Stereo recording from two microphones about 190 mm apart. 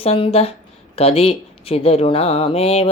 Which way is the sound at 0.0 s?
30° left (ahead or behind).